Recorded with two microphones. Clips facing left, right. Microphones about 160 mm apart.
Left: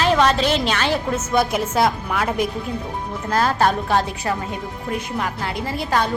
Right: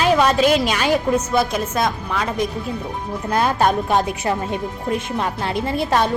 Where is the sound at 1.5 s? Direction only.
10° left (ahead or behind).